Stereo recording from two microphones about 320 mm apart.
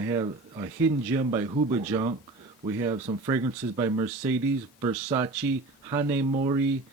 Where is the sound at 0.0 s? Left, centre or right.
Centre.